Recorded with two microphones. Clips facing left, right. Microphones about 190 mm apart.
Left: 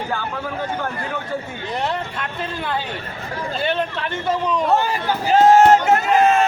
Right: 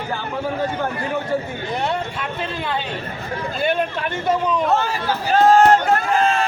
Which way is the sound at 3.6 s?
10° right (ahead or behind).